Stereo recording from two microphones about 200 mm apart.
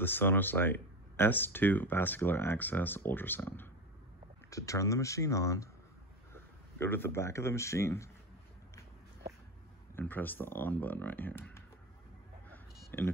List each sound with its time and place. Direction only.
0.0 s speech: 10° left (ahead or behind)
9.9 s speech: 10° left (ahead or behind)
12.4 s chicken: 10° left (ahead or behind)